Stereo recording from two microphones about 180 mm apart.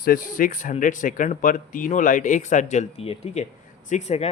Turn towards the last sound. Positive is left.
turn(degrees=35)  # may be behind; listen again after turning